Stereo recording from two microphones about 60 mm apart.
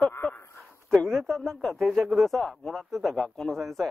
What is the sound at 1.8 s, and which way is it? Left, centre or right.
Speech, centre.